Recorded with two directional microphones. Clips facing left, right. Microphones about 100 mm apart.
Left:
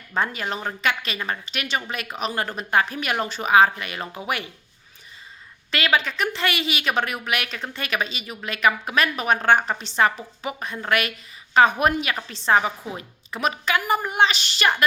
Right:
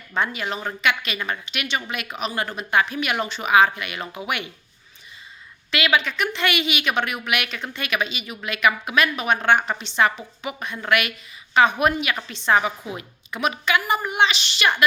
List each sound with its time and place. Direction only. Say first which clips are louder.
0.1 s a woman's voice: even; 40° left (ahead or behind)
5.7 s a woman's voice: right 1 dB; 40° left (ahead or behind)